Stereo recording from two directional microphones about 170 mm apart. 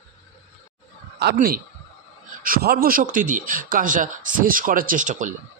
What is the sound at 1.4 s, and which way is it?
A man's voice, 55° right (ahead or behind).